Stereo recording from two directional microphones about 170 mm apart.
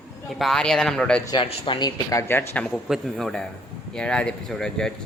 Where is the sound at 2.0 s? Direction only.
15° left (ahead or behind).